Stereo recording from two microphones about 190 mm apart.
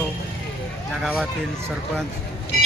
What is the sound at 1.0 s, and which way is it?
Speech, 5° left (ahead or behind).